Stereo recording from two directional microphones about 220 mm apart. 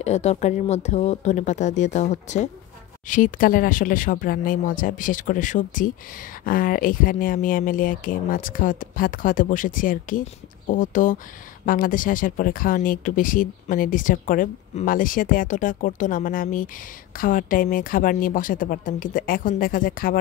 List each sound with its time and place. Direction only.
0.0 s speech: 30° left (ahead or behind)